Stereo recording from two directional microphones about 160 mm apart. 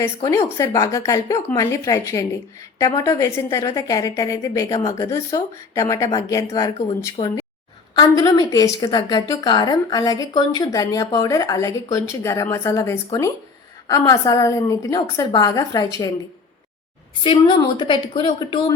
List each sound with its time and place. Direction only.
0.0 s a woman's voice: 20° left (ahead or behind)
17.2 s a woman's voice: 30° left (ahead or behind)